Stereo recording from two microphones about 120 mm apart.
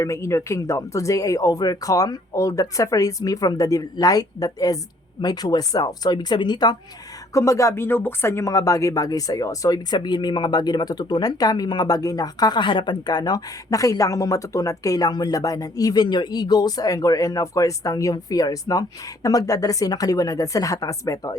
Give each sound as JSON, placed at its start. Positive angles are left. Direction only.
{"t": 0.0, "sound": "speech", "side_deg": 25}
{"t": 7.3, "sound": "speech", "side_deg": 25}